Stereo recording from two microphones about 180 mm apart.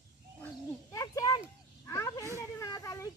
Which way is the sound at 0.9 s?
20° left (ahead or behind).